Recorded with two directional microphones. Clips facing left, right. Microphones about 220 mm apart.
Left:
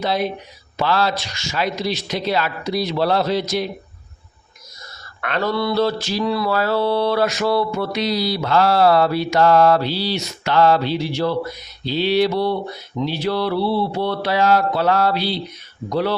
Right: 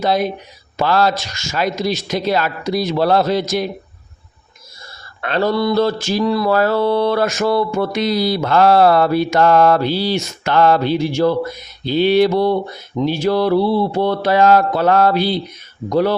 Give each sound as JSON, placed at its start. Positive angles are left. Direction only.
{"t": 0.0, "sound": "mantra", "side_deg": -45}
{"t": 5.2, "sound": "mantra", "side_deg": -35}